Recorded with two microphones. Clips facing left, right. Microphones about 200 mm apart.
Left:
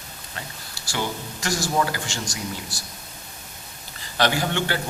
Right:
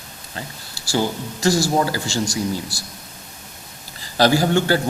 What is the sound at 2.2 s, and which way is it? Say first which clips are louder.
Speech: right 9 dB; 10° right (ahead or behind).